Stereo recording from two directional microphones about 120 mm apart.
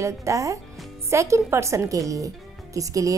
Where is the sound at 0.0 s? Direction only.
25° right (ahead or behind).